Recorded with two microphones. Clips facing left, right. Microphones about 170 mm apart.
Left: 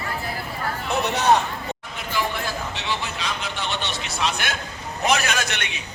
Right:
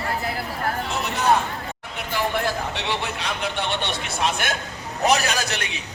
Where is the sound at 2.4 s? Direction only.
65° right (ahead or behind); by 4.5 s 50° right (ahead or behind).